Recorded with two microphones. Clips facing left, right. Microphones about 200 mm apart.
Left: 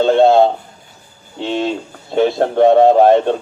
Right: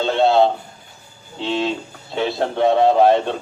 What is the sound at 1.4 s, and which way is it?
Speech, 50° left (ahead or behind).